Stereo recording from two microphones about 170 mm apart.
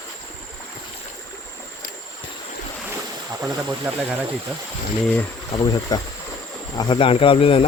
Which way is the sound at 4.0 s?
5° right (ahead or behind).